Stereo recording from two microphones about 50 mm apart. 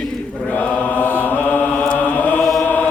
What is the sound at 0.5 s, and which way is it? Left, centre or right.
Mantra, left.